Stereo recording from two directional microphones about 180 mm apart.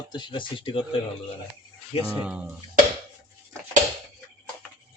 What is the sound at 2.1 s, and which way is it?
Speech, 5° right (ahead or behind).